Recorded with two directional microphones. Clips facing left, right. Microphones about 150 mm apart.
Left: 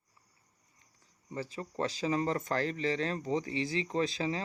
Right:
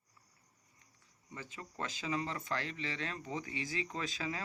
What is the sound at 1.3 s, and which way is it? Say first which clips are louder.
Speech: left 9 dB; 35° left (ahead or behind).